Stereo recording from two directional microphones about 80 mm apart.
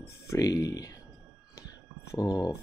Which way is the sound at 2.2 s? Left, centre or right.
Left.